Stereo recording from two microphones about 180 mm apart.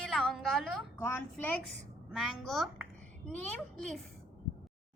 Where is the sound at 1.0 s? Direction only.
10° left (ahead or behind).